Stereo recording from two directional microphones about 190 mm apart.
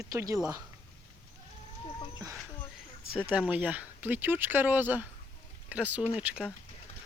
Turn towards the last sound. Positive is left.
turn(degrees=-5)  # may be behind; listen again after turning